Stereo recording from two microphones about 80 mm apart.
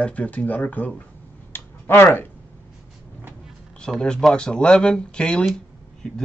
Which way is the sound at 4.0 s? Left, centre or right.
Centre.